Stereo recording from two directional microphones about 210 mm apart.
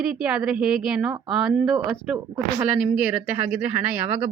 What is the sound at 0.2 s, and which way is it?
A woman's voice, 5° right (ahead or behind).